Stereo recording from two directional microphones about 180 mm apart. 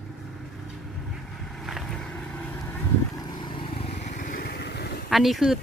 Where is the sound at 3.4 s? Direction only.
30° left (ahead or behind); by 4.9 s 65° left (ahead or behind).